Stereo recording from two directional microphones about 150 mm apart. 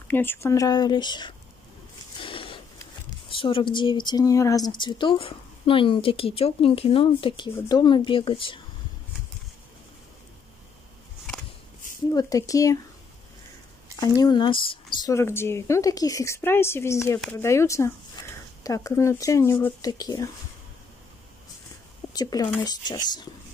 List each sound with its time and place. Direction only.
0.1 s a woman's voice: 15° left (ahead or behind); by 1.3 s 30° left (ahead or behind)
2.1 s a sound: 35° left (ahead or behind)
3.3 s speech: 35° left (ahead or behind)
12.1 s a woman's voice: 25° left (ahead or behind)
13.9 s speech: 25° left (ahead or behind)
15.0 s a woman's voice: 15° left (ahead or behind)
22.1 s a woman's voice: 25° left (ahead or behind)